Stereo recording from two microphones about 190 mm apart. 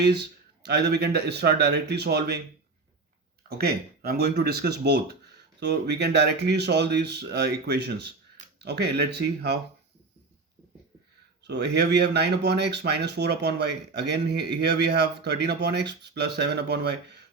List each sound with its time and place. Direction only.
0.0 s speech: 60° right (ahead or behind)
3.6 s speech: 55° right (ahead or behind)
11.4 s speech: 65° right (ahead or behind)